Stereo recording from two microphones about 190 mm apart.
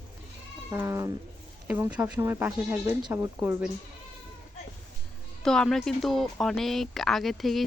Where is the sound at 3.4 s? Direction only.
10° right (ahead or behind).